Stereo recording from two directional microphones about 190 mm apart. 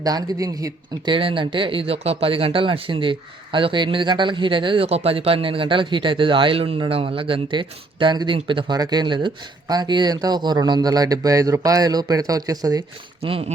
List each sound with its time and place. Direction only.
0.0 s speech: 20° right (ahead or behind)
13.2 s speech: 30° right (ahead or behind)